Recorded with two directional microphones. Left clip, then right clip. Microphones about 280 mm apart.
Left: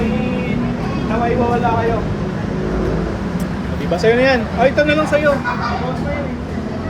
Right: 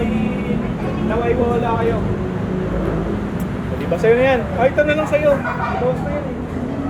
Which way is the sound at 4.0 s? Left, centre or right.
Left.